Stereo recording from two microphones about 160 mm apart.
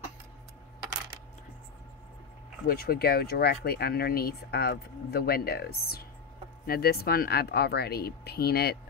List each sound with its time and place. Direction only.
2.6 s speech: 75° left (ahead or behind)